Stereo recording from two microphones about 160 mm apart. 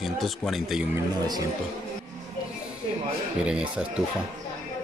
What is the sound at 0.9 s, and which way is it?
Speech, 25° right (ahead or behind).